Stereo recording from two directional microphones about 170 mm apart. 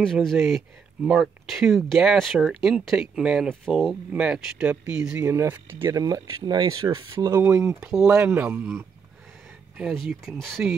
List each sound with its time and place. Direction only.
0.0 s speech: centre (ahead or behind)